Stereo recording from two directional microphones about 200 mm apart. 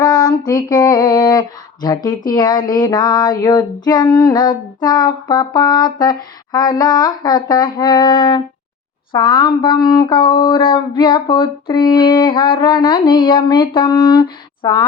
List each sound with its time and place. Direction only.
0.0 s female singing: 20° left (ahead or behind)